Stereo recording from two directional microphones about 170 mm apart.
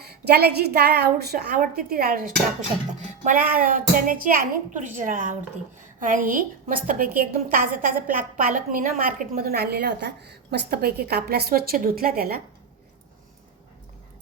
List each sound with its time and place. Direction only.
0.0 s a woman's voice: 70° right (ahead or behind)